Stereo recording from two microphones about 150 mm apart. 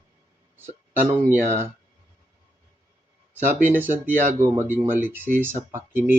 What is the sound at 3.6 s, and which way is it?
Speech, 15° right (ahead or behind).